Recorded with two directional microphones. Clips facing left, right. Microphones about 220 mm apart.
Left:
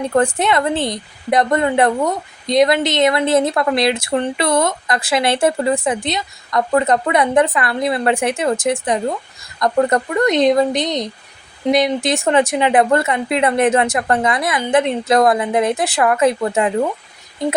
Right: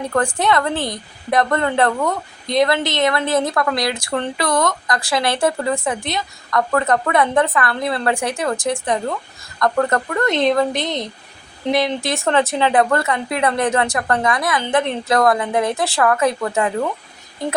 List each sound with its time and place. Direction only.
0.0 s a woman's voice: 20° left (ahead or behind)